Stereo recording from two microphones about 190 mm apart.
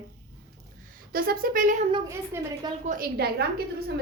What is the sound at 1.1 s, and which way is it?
Speech, 50° right (ahead or behind).